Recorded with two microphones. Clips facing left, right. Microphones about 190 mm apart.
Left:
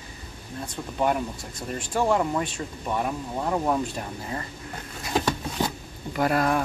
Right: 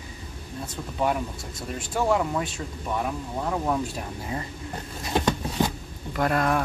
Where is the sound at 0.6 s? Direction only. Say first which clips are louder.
Left 1 dB; centre (ahead or behind).